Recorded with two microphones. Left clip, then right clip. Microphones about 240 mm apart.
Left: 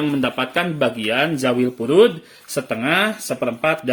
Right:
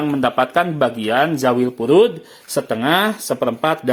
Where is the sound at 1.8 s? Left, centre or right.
Centre.